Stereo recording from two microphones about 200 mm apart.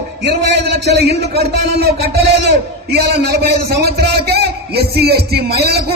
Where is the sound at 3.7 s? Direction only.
55° right (ahead or behind).